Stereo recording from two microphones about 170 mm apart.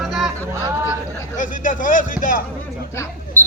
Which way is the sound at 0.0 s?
Centre (ahead or behind).